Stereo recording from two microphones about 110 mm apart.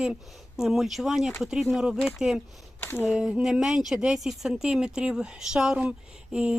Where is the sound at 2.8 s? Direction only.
20° left (ahead or behind).